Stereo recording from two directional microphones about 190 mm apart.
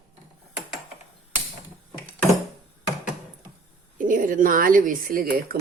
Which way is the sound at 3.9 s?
45° right (ahead or behind).